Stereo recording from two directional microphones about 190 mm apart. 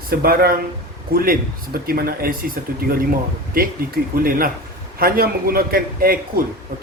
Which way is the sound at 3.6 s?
50° right (ahead or behind).